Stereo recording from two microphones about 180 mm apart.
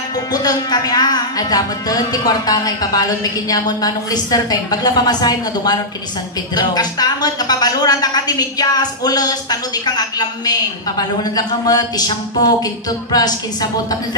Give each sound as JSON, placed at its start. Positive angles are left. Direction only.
{"t": 0.1, "sound": "a woman's voice", "side_deg": 20}